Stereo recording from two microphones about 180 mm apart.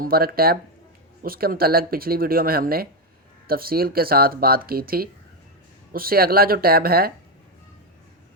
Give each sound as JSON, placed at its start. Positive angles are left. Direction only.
{"t": 0.0, "sound": "speech", "side_deg": -55}